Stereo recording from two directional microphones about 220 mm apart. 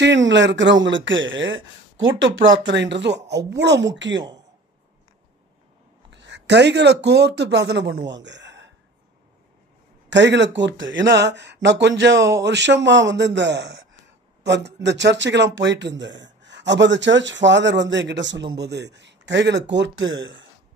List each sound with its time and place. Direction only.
0.0 s speech: 55° right (ahead or behind)
6.0 s speech: 55° right (ahead or behind)
10.0 s speech: 55° right (ahead or behind)